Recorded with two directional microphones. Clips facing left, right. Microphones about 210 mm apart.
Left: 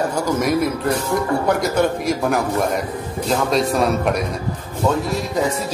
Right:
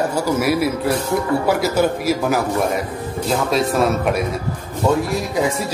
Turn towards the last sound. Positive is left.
turn(degrees=0)  # may be behind; listen again after turning